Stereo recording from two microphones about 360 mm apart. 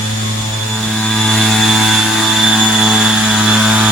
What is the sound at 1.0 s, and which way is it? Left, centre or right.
Vehicle, centre.